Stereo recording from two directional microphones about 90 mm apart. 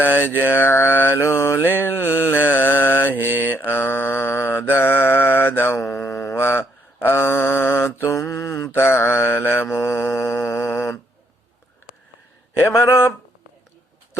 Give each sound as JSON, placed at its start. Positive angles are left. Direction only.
{"t": 0.0, "sound": "mantra", "side_deg": 25}
{"t": 3.2, "sound": "mantra", "side_deg": -20}
{"t": 3.6, "sound": "mantra", "side_deg": 25}
{"t": 12.5, "sound": "speech", "side_deg": 25}